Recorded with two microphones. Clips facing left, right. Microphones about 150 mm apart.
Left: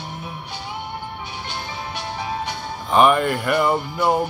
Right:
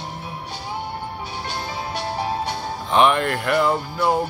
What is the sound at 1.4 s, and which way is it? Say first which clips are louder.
Music: right 3 dB; 35° right (ahead or behind).